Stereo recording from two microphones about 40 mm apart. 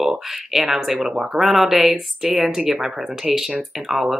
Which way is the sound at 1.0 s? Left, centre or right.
Centre.